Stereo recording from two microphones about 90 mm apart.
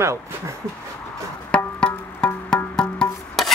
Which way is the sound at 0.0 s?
35° right (ahead or behind).